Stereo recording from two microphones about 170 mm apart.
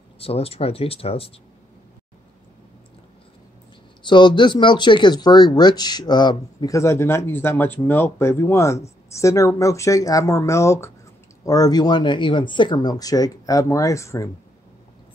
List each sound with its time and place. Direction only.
0.2 s speech: 35° left (ahead or behind)
4.0 s speech: 30° left (ahead or behind)